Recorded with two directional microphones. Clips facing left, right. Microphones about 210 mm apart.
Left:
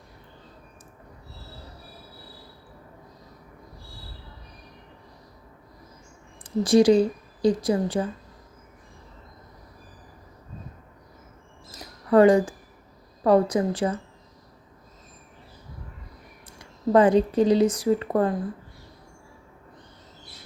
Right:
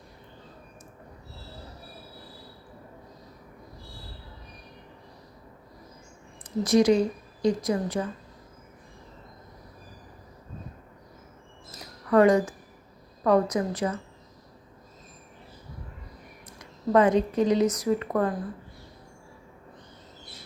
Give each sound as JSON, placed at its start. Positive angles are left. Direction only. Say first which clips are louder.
{"t": 6.6, "sound": "a woman's voice", "louder": "left 3 dB", "side_deg": 30}
{"t": 12.1, "sound": "a woman's voice", "louder": "left 3 dB", "side_deg": 30}
{"t": 16.6, "sound": "speech", "louder": "left 3 dB", "side_deg": 30}